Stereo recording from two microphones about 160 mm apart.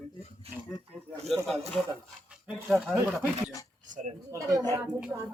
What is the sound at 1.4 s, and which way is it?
Speech, centre (ahead or behind).